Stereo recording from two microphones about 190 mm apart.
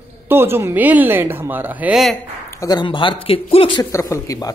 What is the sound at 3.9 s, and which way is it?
Speech, 15° left (ahead or behind).